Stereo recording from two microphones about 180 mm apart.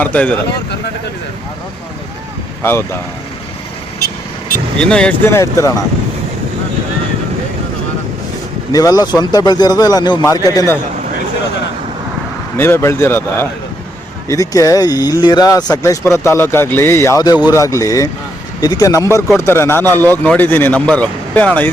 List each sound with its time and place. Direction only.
0.0 s speech: 10° left (ahead or behind)
2.6 s speech: 10° left (ahead or behind)
4.8 s speech: 5° left (ahead or behind)
8.7 s speech: 20° left (ahead or behind)
12.5 s speech: 10° left (ahead or behind)